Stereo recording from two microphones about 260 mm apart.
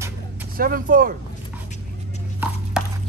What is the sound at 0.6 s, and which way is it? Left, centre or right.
Speech, right.